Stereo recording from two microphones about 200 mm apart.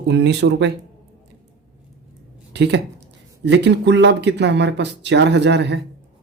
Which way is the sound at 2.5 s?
60° right (ahead or behind).